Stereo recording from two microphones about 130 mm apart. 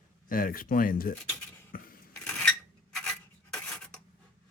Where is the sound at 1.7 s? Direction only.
90° left.